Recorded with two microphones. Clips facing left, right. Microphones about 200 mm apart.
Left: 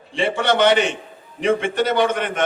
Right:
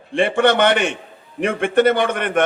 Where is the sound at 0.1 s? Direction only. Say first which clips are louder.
Right 4 dB; 55° right (ahead or behind).